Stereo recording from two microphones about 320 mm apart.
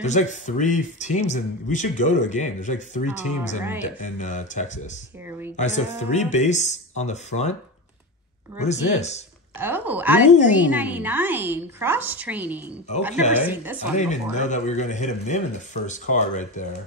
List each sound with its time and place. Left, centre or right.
0.0 s speech: left
8.5 s speech: left
9.6 s a woman's voice: centre
13.9 s speech: left